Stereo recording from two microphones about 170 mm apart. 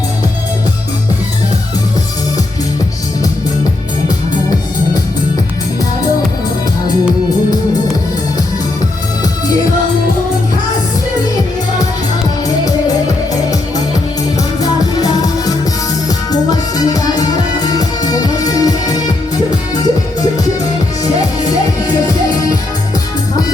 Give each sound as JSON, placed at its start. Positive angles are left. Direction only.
{"t": 13.3, "sound": "music", "side_deg": 20}